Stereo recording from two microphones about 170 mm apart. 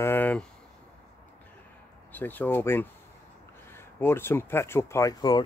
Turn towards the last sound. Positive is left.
turn(degrees=25)  # may be behind; listen again after turning